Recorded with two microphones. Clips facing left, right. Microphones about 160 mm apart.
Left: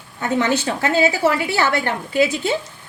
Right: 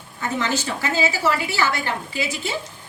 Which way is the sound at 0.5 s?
60° left (ahead or behind).